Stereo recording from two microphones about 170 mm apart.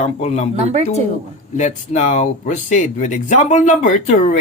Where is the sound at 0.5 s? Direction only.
40° right (ahead or behind).